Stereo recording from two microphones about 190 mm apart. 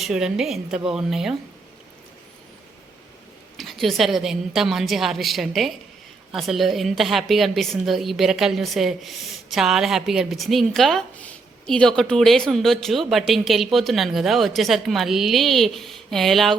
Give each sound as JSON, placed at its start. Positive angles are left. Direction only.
{"t": 0.0, "sound": "a woman's voice", "side_deg": -5}
{"t": 3.6, "sound": "a woman's voice", "side_deg": 0}